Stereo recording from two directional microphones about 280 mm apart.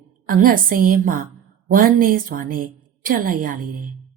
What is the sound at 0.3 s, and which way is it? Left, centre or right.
A woman's voice, right.